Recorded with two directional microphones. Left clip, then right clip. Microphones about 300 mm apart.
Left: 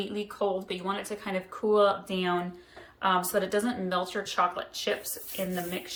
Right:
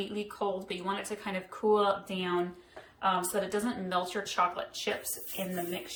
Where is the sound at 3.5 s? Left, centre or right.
Centre.